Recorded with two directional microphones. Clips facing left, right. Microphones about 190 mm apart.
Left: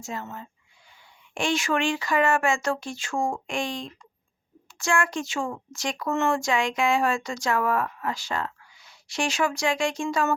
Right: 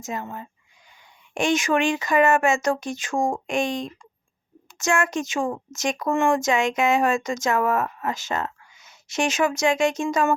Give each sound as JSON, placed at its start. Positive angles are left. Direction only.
{"t": 0.0, "sound": "speech", "side_deg": -15}